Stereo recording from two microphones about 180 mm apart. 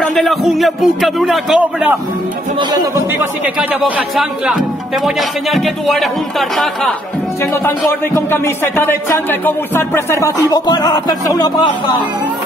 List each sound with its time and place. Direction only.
0.1 s a man's voice: centre (ahead or behind)
4.2 s a man's voice: centre (ahead or behind)
7.6 s speech: 10° left (ahead or behind)